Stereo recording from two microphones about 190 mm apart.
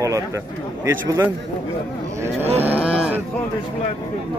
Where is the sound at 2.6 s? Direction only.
5° right (ahead or behind).